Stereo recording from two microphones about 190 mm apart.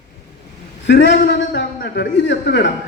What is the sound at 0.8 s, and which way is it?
A man's voice, 65° left (ahead or behind).